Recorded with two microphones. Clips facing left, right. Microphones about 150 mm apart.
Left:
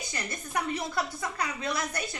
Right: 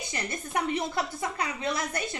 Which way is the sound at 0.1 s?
25° right (ahead or behind).